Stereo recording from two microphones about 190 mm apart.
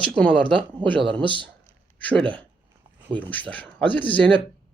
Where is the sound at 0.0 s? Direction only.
5° left (ahead or behind).